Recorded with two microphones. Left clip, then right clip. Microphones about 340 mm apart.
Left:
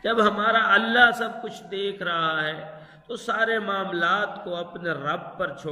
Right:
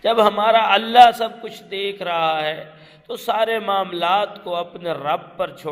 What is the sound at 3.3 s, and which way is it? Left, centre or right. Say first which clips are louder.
A man's voice: right 5 dB; right.